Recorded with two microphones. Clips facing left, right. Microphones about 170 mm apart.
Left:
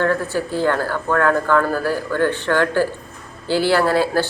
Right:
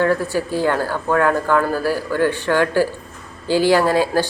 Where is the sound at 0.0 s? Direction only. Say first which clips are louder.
Right 1 dB; 10° right (ahead or behind).